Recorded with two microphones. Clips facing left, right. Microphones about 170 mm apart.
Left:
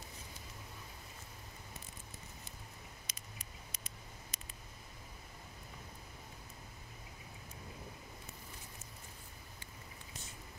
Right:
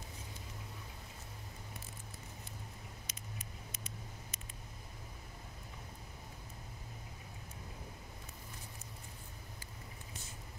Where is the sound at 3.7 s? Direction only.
35° left (ahead or behind).